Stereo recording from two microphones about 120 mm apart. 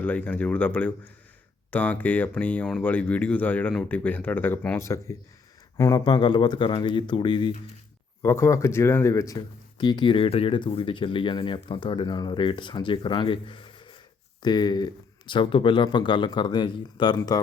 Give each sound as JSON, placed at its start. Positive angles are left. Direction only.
{"t": 0.0, "sound": "speech", "side_deg": 10}
{"t": 4.8, "sound": "speech", "side_deg": 25}
{"t": 8.2, "sound": "speech", "side_deg": 20}